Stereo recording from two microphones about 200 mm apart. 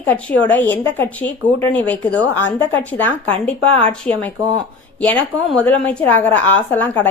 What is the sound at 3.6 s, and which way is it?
Speech, 30° right (ahead or behind).